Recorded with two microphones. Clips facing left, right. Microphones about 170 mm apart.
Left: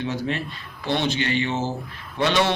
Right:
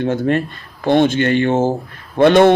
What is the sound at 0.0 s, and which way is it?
A man's voice, 50° right (ahead or behind).